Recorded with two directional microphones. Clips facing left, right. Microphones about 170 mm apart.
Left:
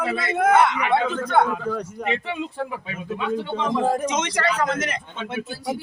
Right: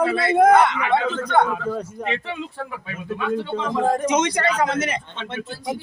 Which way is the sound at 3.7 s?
10° left (ahead or behind).